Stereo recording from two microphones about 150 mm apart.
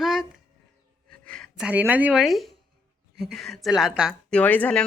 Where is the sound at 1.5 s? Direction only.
10° right (ahead or behind).